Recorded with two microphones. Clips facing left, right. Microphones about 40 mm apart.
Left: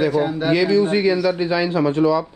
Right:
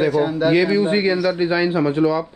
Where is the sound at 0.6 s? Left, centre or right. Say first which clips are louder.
Even; right.